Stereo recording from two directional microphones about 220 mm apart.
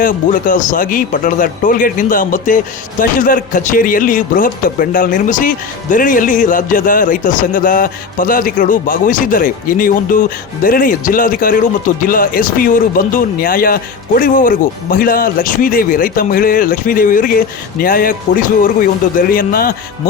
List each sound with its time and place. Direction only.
0.0 s speech: 35° left (ahead or behind)